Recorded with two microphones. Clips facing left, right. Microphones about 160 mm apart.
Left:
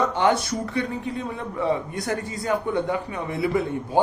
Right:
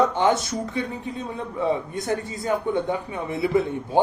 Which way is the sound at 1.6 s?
20° right (ahead or behind).